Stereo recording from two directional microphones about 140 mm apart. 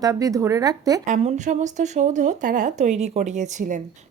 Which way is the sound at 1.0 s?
60° right (ahead or behind).